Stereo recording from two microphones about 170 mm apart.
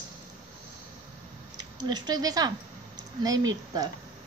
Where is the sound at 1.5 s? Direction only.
25° right (ahead or behind).